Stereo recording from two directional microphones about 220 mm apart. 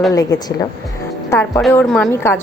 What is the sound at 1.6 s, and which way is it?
Speech, centre (ahead or behind).